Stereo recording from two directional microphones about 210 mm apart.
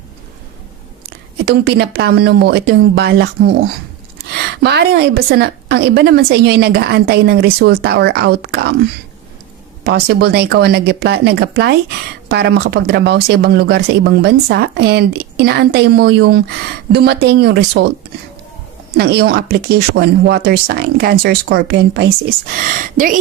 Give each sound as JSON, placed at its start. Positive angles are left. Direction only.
{"t": 1.5, "sound": "speech", "side_deg": -50}
{"t": 9.8, "sound": "speech", "side_deg": -50}
{"t": 18.9, "sound": "speech", "side_deg": -50}
{"t": 22.5, "sound": "speech", "side_deg": -40}